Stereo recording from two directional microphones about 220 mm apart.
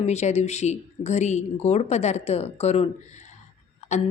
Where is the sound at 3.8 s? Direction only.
30° left (ahead or behind).